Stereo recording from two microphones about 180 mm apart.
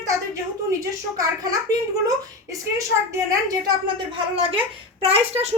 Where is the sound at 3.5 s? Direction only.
25° right (ahead or behind).